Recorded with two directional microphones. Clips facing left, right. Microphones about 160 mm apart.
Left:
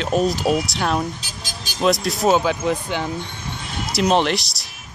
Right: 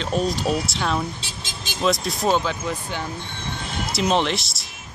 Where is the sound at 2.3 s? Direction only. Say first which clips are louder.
Left 5 dB; 15° left (ahead or behind).